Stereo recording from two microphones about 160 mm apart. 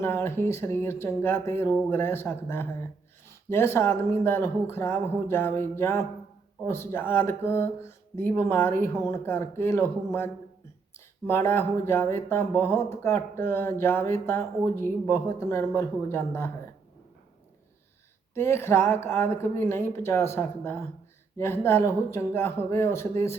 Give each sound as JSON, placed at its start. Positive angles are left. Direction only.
{"t": 0.0, "sound": "speech", "side_deg": 15}
{"t": 18.3, "sound": "speech", "side_deg": 15}